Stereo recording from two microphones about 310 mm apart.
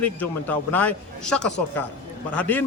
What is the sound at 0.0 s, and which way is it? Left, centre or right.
A man's voice, centre.